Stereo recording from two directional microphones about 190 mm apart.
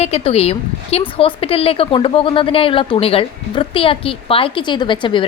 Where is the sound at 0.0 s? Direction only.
30° left (ahead or behind).